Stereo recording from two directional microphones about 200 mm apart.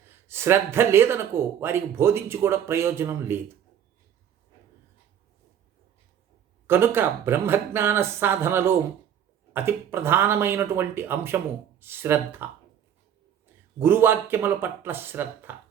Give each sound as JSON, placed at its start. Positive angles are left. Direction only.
{"t": 0.3, "sound": "speech", "side_deg": -10}
{"t": 6.7, "sound": "speech", "side_deg": -10}
{"t": 13.7, "sound": "speech", "side_deg": -10}